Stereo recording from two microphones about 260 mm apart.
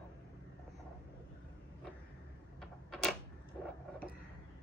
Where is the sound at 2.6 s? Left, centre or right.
Centre.